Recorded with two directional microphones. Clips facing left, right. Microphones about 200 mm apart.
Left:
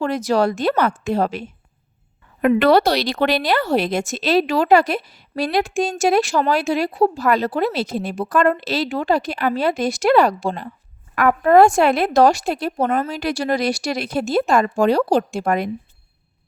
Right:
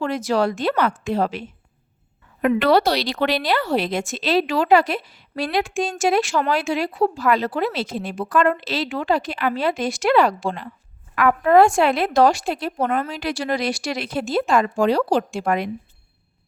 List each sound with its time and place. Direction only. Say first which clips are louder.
0.0 s speech: left 2 dB; 40° left (ahead or behind)